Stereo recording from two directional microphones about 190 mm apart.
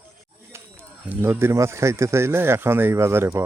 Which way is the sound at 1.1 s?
10° right (ahead or behind).